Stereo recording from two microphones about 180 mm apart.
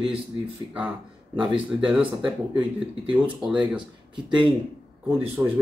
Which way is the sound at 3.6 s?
25° right (ahead or behind).